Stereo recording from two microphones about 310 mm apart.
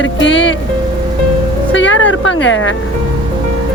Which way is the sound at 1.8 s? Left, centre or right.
Left.